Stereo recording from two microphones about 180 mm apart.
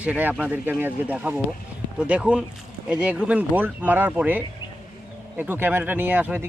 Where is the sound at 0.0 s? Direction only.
10° right (ahead or behind).